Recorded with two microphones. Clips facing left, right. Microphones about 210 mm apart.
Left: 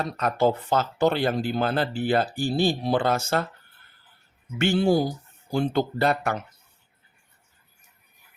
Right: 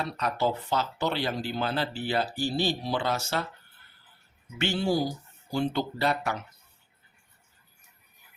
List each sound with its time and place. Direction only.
0.0 s speech: 50° left (ahead or behind)
4.5 s speech: 50° left (ahead or behind)